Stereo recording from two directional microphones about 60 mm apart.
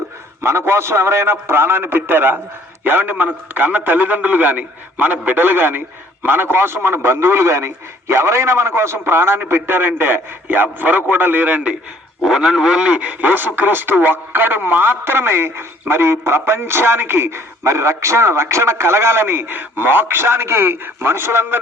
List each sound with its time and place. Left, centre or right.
0.4 s a man's voice: right
12.2 s speech: centre; by 21.6 s right